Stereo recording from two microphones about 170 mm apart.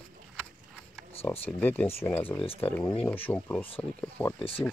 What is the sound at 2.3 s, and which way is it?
Speech, 30° left (ahead or behind).